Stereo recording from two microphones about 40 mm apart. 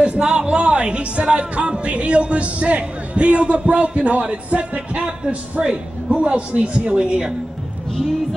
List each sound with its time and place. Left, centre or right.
0.2 s speech: centre